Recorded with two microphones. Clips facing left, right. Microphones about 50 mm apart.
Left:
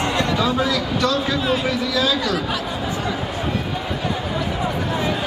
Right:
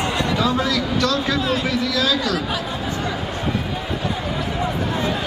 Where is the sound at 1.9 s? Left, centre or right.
Left.